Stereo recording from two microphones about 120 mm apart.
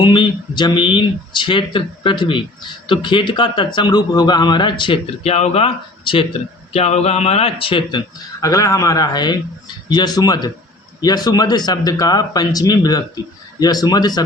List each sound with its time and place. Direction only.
0.0 s speech: 40° left (ahead or behind)
5.2 s speech: 60° left (ahead or behind)
6.7 s speech: 60° left (ahead or behind); by 8.0 s 45° left (ahead or behind)
8.4 s speech: 30° left (ahead or behind)